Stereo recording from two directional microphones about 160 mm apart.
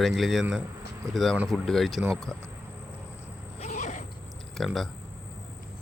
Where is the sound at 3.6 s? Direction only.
50° left (ahead or behind).